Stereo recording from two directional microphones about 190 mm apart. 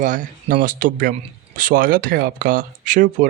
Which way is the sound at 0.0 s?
40° right (ahead or behind).